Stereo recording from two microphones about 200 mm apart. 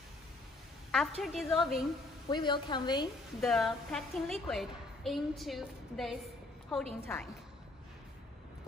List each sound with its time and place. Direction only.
0.9 s a woman's voice: centre (ahead or behind)
2.2 s a woman's voice: 25° left (ahead or behind)
3.3 s a woman's voice: centre (ahead or behind)